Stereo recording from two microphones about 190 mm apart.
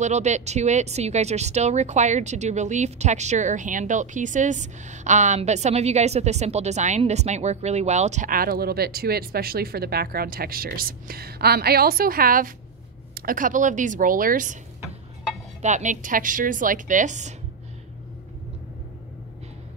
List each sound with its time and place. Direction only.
0.0 s a woman's voice: 35° right (ahead or behind)
15.6 s a woman's voice: 40° right (ahead or behind)